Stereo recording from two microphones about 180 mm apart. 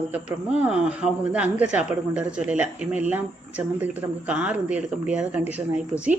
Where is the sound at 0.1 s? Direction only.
5° right (ahead or behind).